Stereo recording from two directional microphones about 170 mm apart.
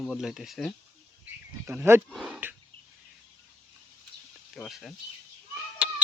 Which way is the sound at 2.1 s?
5° right (ahead or behind).